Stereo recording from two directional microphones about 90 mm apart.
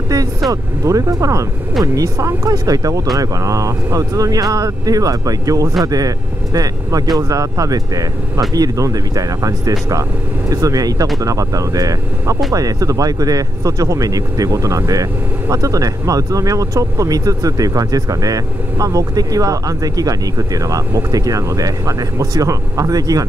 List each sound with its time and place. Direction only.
0.5 s speech: 40° right (ahead or behind)